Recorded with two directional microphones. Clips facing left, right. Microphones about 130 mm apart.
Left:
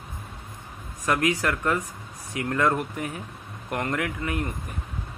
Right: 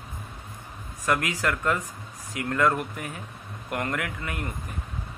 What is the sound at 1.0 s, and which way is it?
Speech, 20° left (ahead or behind).